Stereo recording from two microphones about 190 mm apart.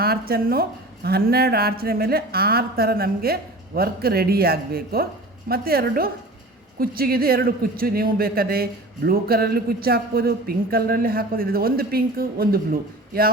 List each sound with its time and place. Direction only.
0.0 s a man's voice: 50° right (ahead or behind)